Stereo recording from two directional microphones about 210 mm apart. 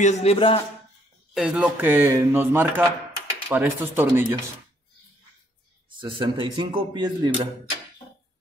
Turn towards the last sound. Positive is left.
turn(degrees=-20)  # may be behind; listen again after turning